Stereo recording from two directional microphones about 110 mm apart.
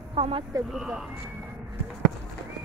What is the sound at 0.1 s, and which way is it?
Speech, 60° right (ahead or behind).